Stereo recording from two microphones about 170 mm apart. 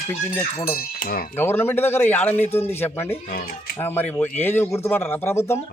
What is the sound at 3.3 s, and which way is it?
Speech, 60° left (ahead or behind).